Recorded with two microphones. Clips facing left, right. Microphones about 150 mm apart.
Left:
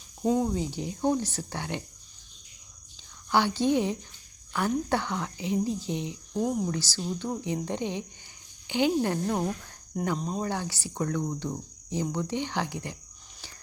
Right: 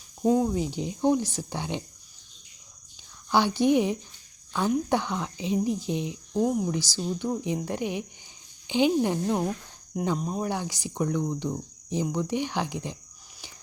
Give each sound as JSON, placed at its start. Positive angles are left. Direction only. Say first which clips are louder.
{"t": 0.2, "sound": "speech", "louder": "right 3 dB", "side_deg": -5}
{"t": 0.5, "sound": "speech", "louder": "right 2 dB", "side_deg": -15}
{"t": 3.2, "sound": "speech", "louder": "right 2 dB", "side_deg": -15}
{"t": 6.3, "sound": "speech", "louder": "right 3 dB", "side_deg": -5}